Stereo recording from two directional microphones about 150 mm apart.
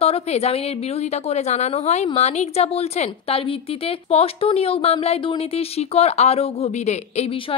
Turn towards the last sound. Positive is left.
turn(degrees=40)  # may be behind; listen again after turning